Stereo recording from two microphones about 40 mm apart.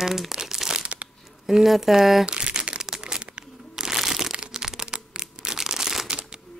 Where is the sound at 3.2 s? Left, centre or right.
Right.